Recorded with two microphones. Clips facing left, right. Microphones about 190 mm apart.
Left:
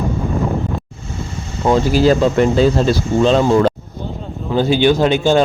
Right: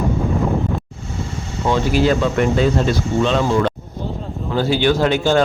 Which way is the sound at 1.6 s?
35° left (ahead or behind).